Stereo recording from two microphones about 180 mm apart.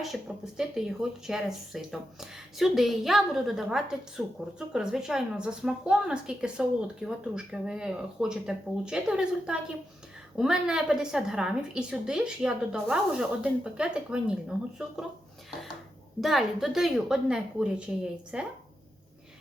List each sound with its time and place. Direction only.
0.0 s a woman's voice: centre (ahead or behind)
16.2 s a woman's voice: centre (ahead or behind)